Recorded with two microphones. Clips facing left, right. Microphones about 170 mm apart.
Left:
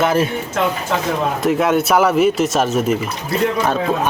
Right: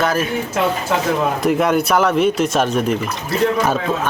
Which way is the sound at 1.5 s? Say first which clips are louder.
Left 1 dB; centre (ahead or behind).